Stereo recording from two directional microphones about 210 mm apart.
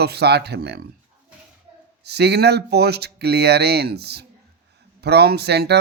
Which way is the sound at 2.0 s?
50° right (ahead or behind).